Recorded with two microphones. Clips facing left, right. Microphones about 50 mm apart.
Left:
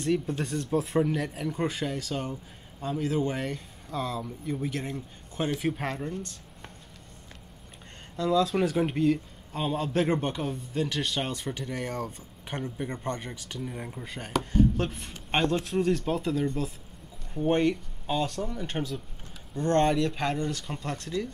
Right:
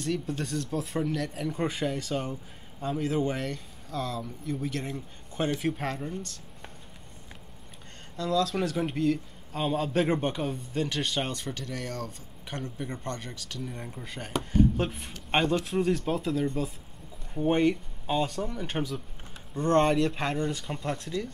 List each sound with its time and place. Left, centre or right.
0.0 s speech: centre
1.3 s a man's voice: centre
8.2 s a man's voice: centre